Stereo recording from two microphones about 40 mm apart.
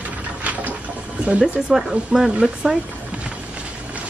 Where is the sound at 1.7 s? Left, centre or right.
Centre.